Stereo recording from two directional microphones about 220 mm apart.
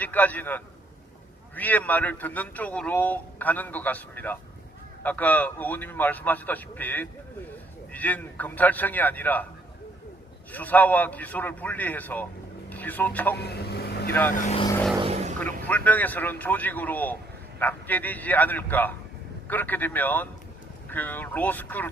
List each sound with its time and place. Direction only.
0.0 s a man's voice: 5° left (ahead or behind)
10.5 s a man's voice: 5° left (ahead or behind)
13.3 s speech: 45° left (ahead or behind)
14.1 s a man's voice: 10° left (ahead or behind)
14.3 s speech: 30° left (ahead or behind)
14.9 s vehicle: 25° right (ahead or behind)
15.4 s a man's voice: 5° left (ahead or behind)